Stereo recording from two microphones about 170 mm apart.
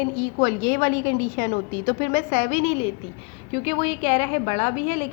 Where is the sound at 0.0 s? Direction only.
50° left (ahead or behind).